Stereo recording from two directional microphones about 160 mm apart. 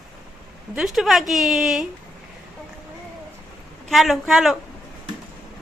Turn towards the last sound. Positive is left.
turn(degrees=0)  # may be behind; listen again after turning